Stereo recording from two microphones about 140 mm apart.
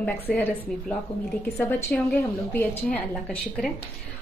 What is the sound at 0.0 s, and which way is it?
A woman's voice, 10° left (ahead or behind).